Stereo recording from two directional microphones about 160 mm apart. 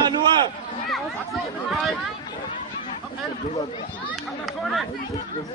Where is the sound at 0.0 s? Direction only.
25° right (ahead or behind).